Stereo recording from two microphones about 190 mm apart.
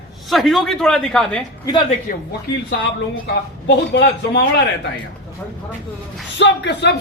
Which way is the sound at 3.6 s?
60° left (ahead or behind).